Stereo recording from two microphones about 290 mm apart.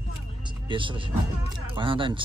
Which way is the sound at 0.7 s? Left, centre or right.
Centre.